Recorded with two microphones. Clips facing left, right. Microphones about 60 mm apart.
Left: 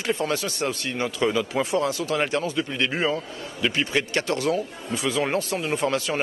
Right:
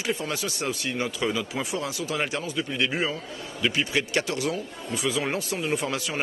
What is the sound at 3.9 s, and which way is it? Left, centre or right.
Speech, centre.